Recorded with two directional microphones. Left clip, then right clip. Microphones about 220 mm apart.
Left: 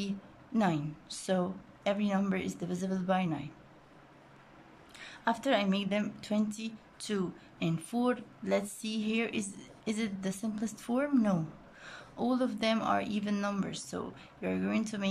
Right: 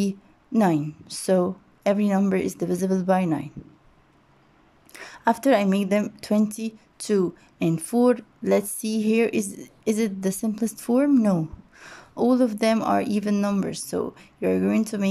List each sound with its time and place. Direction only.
0.0 s a woman's voice: 20° right (ahead or behind)
4.9 s a woman's voice: 25° right (ahead or behind)